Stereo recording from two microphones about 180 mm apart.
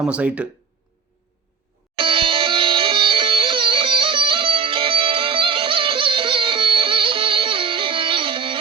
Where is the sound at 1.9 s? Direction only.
30° right (ahead or behind).